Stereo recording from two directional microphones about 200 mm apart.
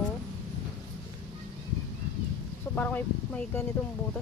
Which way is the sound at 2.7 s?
10° left (ahead or behind).